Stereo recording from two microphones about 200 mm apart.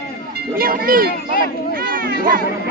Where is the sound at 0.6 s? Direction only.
45° right (ahead or behind).